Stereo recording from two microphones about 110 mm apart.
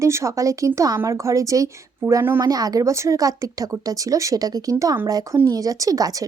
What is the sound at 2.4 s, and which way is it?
A woman's voice, 35° right (ahead or behind).